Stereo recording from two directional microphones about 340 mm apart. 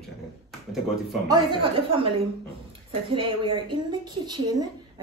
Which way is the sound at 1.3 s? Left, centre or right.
Centre.